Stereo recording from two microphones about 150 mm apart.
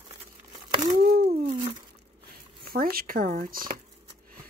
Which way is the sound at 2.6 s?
80° right.